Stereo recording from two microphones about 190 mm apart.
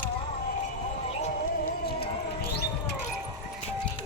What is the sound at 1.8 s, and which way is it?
Music, 55° left (ahead or behind).